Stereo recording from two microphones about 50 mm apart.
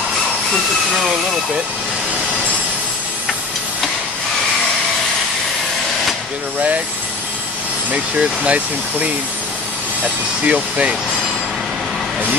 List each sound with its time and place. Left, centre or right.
7.9 s speech: right
10.4 s speech: right